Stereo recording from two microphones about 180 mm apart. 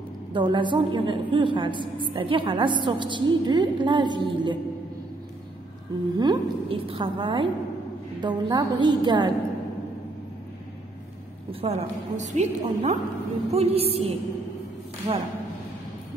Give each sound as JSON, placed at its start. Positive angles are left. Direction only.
{"t": 0.3, "sound": "a woman's voice", "side_deg": -25}
{"t": 6.1, "sound": "a woman's voice", "side_deg": -20}
{"t": 11.6, "sound": "a woman's voice", "side_deg": -40}